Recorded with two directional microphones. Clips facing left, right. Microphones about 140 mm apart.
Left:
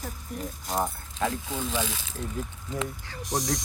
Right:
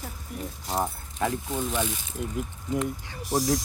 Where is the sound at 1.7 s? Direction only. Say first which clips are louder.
Right 2 dB; 90° left.